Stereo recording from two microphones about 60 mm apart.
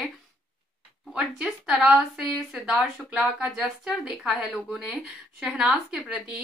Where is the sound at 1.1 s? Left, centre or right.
Centre.